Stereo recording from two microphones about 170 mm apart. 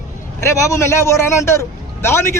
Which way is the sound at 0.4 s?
15° left (ahead or behind).